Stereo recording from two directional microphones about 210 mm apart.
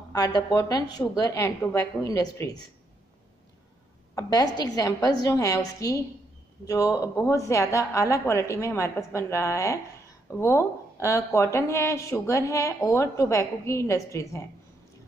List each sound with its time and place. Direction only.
0.1 s speech: 15° left (ahead or behind)
4.1 s speech: 15° left (ahead or behind)